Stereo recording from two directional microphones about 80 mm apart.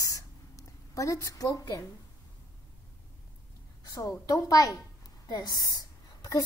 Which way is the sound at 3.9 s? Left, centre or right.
Left.